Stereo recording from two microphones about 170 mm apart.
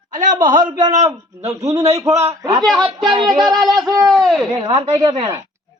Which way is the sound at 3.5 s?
Centre (ahead or behind).